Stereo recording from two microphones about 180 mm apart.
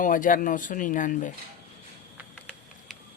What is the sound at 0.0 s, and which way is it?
Speech, 45° left (ahead or behind).